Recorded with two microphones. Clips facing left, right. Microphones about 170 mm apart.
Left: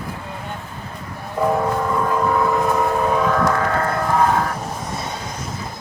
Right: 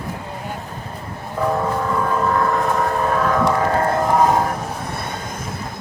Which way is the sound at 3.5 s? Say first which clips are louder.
Right 2 dB; 25° right (ahead or behind).